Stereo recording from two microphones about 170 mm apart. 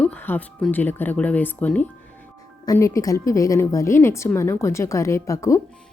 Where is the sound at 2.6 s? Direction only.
20° left (ahead or behind).